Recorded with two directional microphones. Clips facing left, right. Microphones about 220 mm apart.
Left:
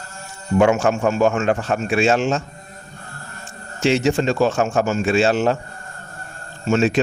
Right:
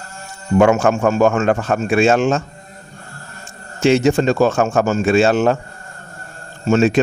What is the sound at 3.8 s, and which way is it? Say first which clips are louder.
A man's voice: right 4 dB; 50° right (ahead or behind).